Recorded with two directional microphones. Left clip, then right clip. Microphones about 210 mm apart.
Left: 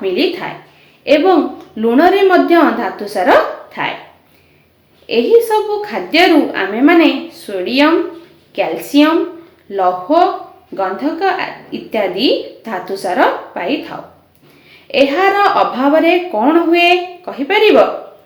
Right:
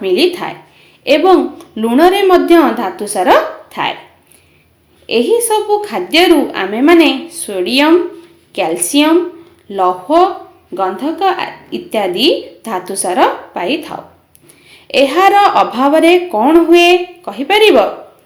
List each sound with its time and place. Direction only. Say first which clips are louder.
0.0 s a woman's voice: right 3 dB; 35° right (ahead or behind)
5.0 s a woman's voice: left 1 dB; 35° right (ahead or behind)